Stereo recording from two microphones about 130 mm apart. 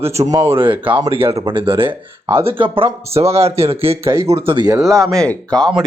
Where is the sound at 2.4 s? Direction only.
45° right (ahead or behind).